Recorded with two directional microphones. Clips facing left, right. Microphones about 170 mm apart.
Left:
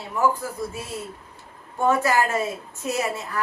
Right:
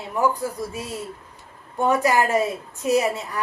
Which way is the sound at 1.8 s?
15° right (ahead or behind).